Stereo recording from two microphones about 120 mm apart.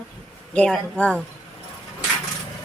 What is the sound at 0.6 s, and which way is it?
Speech, 5° left (ahead or behind).